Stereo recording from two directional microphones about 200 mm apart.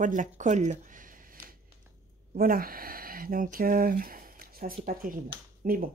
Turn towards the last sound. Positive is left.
turn(degrees=-45)  # may be behind; listen again after turning